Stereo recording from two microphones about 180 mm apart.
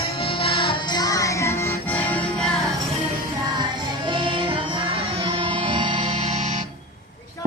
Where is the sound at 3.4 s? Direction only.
25° right (ahead or behind).